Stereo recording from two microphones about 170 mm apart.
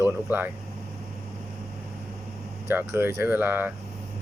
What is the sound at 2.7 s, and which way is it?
Speech, 15° right (ahead or behind).